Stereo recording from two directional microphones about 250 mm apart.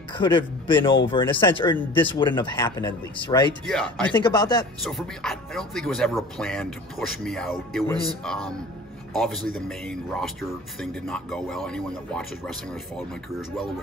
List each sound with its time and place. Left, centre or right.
0.1 s speech: centre
3.6 s speech: centre
4.2 s speech: centre
4.8 s speech: centre